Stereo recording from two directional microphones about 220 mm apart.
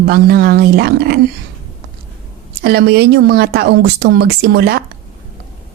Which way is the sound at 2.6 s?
45° right (ahead or behind).